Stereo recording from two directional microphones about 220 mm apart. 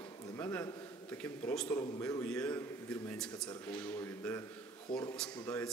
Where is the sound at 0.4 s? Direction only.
10° left (ahead or behind).